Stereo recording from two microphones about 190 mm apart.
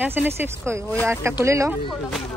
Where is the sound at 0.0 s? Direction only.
10° right (ahead or behind).